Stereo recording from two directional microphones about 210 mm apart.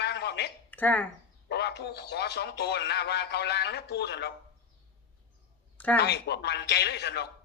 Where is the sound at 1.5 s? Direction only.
50° left (ahead or behind).